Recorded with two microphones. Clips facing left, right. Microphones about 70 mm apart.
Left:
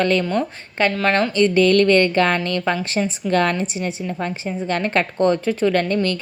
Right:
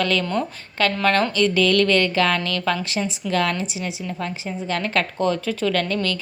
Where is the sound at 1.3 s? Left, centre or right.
Left.